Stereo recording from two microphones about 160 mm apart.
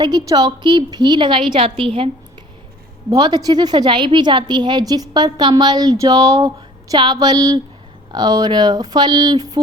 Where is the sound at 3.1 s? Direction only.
25° right (ahead or behind).